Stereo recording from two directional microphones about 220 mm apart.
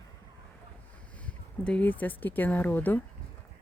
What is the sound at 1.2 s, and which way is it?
Speech, 5° left (ahead or behind).